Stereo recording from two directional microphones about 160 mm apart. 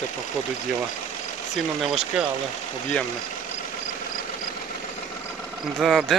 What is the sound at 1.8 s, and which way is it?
Speech, centre (ahead or behind).